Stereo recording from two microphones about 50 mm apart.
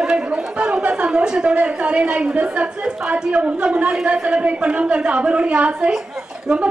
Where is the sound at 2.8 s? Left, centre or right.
Centre.